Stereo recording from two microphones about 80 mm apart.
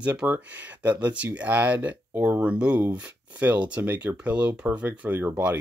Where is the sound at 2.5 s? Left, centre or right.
Centre.